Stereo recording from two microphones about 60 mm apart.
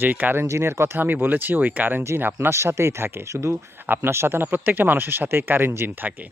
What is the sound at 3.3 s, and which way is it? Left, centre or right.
Speech, right.